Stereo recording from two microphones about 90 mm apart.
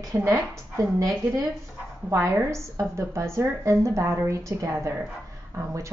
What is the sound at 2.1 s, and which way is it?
A woman's voice, 35° right (ahead or behind).